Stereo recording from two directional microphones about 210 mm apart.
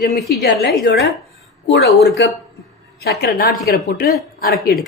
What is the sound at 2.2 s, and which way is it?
A woman's voice, 55° left (ahead or behind).